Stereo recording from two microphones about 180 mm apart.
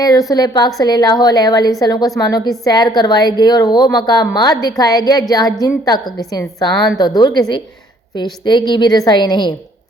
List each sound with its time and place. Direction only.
0.0 s a woman's voice: 20° left (ahead or behind)